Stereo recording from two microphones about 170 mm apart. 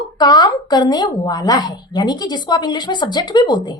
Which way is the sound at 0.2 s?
25° left (ahead or behind).